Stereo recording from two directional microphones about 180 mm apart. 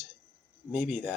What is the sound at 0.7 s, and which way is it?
Speech, 5° right (ahead or behind).